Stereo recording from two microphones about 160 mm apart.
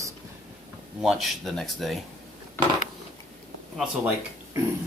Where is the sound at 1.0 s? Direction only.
Centre (ahead or behind).